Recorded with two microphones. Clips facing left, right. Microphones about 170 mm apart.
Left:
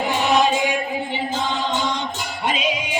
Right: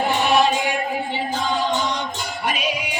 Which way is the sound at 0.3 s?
20° left (ahead or behind).